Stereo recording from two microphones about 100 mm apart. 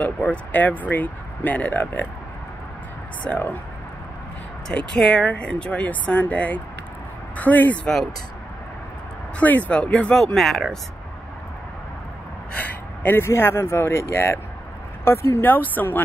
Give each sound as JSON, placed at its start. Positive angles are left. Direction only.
{"t": 0.0, "sound": "speech", "side_deg": 15}
{"t": 3.3, "sound": "speech", "side_deg": 15}
{"t": 4.6, "sound": "speech", "side_deg": 5}
{"t": 9.4, "sound": "speech", "side_deg": 15}
{"t": 12.5, "sound": "speech", "side_deg": 15}